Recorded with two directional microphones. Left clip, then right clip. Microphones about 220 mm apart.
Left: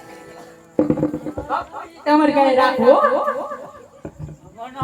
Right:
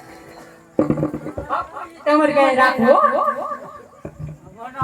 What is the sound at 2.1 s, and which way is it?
Speech, 35° left (ahead or behind).